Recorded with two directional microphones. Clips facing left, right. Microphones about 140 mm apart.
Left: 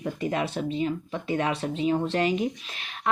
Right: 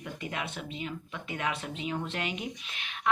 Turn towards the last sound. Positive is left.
turn(degrees=40)  # may be behind; listen again after turning